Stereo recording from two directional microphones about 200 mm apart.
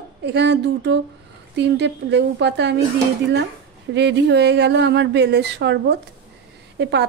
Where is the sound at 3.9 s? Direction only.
60° right (ahead or behind).